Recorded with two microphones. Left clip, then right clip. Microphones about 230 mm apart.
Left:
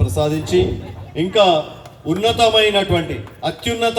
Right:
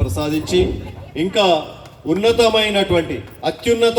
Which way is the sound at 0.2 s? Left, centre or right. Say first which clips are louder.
Left 2 dB; right.